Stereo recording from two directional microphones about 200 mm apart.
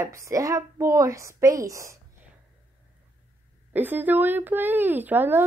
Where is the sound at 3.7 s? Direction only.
10° right (ahead or behind).